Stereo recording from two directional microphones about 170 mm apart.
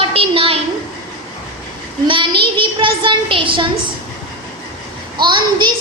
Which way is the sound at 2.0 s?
30° right (ahead or behind).